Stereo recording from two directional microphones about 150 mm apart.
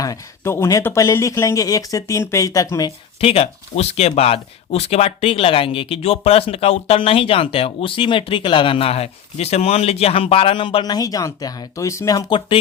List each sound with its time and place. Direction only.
0.0 s speech: 20° left (ahead or behind)
3.2 s speech: 40° left (ahead or behind)